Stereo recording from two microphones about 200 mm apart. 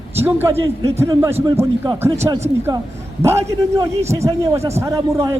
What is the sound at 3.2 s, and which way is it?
A man's voice, 15° right (ahead or behind).